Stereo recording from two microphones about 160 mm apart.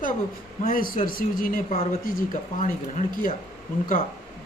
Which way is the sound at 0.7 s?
60° left (ahead or behind).